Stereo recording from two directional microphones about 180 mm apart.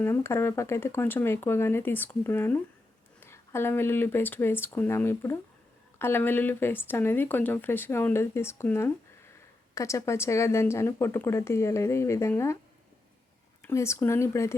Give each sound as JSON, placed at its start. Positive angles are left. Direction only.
{"t": 0.0, "sound": "speech", "side_deg": 15}
{"t": 13.7, "sound": "speech", "side_deg": 15}